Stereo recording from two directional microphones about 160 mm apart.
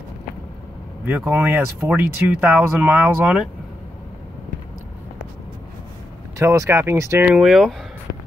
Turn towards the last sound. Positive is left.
turn(degrees=0)  # may be behind; listen again after turning